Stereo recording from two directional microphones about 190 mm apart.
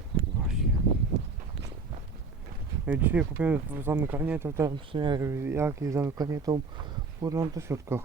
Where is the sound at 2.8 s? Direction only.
10° right (ahead or behind).